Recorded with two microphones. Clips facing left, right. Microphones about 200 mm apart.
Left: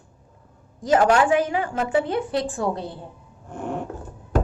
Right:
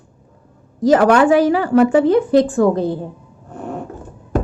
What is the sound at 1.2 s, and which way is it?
A woman's voice, 35° right (ahead or behind).